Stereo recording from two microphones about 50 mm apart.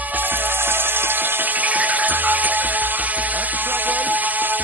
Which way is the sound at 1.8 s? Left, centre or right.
Right.